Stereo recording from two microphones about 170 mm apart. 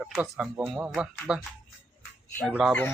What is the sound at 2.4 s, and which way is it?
Speech, 5° right (ahead or behind).